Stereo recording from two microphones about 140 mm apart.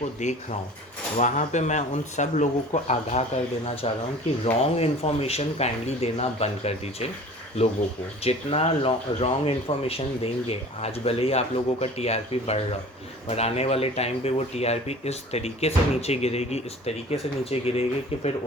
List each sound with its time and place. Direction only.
0.0 s speech: 55° left (ahead or behind)
8.2 s speech: 45° left (ahead or behind)